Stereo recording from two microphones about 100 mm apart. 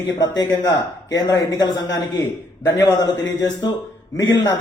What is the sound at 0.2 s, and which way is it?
A man's voice, 40° left (ahead or behind).